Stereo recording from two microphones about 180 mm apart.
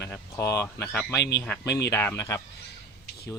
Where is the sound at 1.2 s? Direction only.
65° left (ahead or behind).